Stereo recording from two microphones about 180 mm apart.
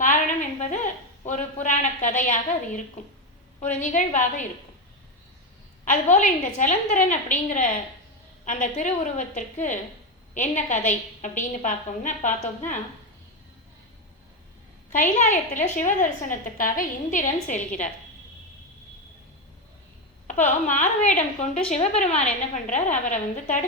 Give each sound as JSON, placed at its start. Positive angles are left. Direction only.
{"t": 0.0, "sound": "a sound", "side_deg": 45}
{"t": 1.2, "sound": "a woman's voice", "side_deg": 45}
{"t": 5.8, "sound": "a woman's voice", "side_deg": 45}
{"t": 14.9, "sound": "a woman's voice", "side_deg": 40}
{"t": 20.7, "sound": "a woman's voice", "side_deg": 45}